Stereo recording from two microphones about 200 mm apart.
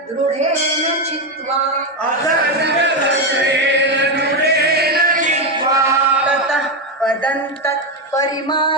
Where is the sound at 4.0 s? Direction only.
55° right (ahead or behind).